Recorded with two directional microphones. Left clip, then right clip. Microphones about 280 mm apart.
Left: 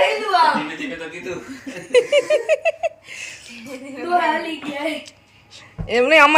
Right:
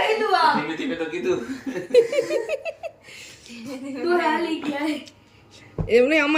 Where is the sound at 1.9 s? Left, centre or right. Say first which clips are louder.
Left 3 dB; centre.